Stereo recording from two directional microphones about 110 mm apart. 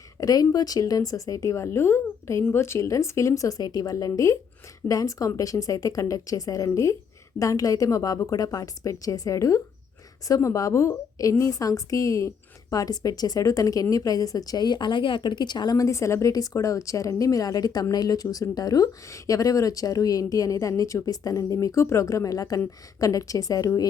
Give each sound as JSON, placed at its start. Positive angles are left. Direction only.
{"t": 0.2, "sound": "a woman's voice", "side_deg": 35}